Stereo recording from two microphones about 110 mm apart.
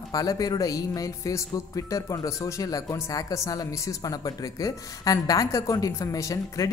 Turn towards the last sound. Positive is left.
turn(degrees=30)  # may be behind; listen again after turning